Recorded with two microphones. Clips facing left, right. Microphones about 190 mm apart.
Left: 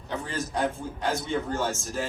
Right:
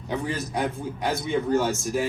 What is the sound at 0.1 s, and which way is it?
Speech, 15° right (ahead or behind).